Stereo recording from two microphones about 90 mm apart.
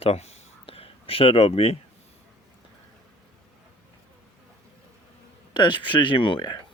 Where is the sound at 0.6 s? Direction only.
90° left.